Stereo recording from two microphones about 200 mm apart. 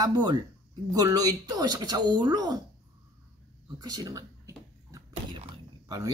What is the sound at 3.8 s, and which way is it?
Speech, 20° right (ahead or behind).